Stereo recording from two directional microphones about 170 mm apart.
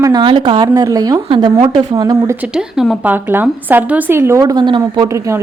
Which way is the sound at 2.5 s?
5° right (ahead or behind).